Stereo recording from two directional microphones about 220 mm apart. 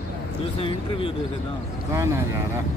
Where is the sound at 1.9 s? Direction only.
10° right (ahead or behind).